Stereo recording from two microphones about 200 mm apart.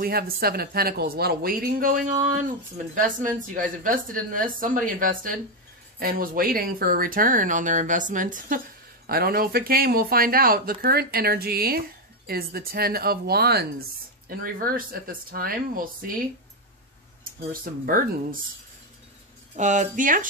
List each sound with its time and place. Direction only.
0.0 s speech: 50° right (ahead or behind)
17.5 s speech: 45° right (ahead or behind)
19.5 s speech: 35° right (ahead or behind)